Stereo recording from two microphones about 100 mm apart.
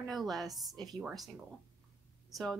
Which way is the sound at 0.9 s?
Centre (ahead or behind).